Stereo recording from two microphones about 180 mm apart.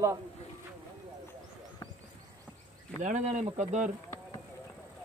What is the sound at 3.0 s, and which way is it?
Speech, 40° right (ahead or behind).